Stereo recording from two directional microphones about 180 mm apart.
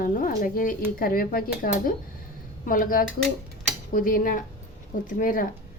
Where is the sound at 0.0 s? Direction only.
50° left (ahead or behind).